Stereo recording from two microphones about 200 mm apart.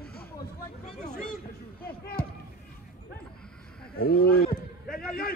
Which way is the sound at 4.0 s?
50° left (ahead or behind).